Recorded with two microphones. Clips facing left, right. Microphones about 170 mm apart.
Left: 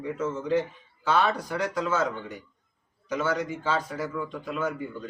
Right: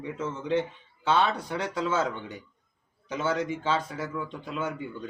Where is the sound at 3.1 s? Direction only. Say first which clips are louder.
Left 1 dB; 25° right (ahead or behind).